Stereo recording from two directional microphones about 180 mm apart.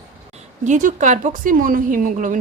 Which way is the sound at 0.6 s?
45° right (ahead or behind).